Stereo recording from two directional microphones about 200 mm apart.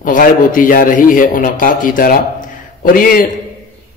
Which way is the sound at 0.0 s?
40° left (ahead or behind).